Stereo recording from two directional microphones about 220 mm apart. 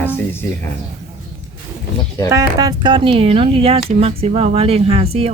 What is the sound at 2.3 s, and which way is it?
Speech, 15° right (ahead or behind).